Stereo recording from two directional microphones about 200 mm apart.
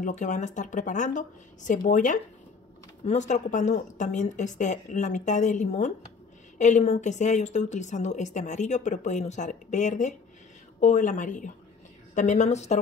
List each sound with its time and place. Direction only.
0.0 s a woman's voice: 35° left (ahead or behind)